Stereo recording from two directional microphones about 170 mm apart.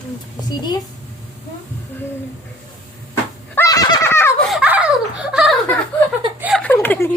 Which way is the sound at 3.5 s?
20° left (ahead or behind).